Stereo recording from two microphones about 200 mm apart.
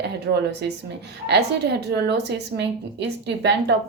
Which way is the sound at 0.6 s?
55° right (ahead or behind).